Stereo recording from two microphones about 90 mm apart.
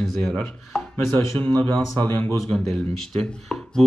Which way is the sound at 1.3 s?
15° left (ahead or behind).